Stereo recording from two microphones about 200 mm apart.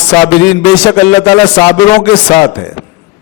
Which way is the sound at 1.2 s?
20° left (ahead or behind).